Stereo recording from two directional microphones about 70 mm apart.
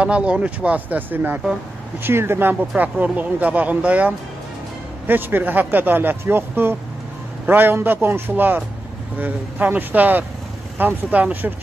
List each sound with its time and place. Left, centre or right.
0.0 s speech: centre; by 2.5 s right
2.8 s speech: right